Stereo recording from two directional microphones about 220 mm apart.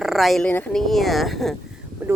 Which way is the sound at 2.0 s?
10° right (ahead or behind).